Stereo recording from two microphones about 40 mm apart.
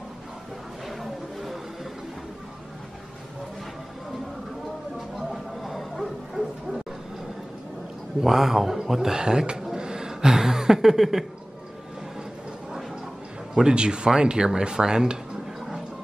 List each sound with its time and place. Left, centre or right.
0.8 s a sound: centre
5.1 s music: centre
8.2 s a man's voice: centre
13.6 s speech: right